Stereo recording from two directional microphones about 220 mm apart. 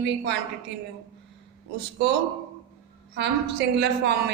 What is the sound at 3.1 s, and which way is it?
A man's voice, 50° right (ahead or behind).